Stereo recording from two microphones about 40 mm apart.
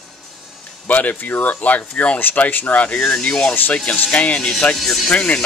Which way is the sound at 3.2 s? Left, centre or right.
Left.